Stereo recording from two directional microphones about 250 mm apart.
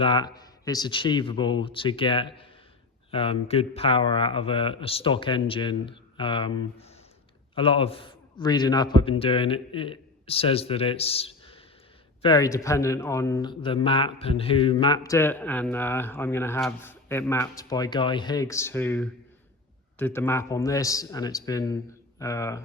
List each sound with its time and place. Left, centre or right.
0.0 s a man's voice: centre